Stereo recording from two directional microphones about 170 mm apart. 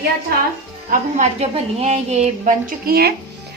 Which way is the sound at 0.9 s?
45° right (ahead or behind).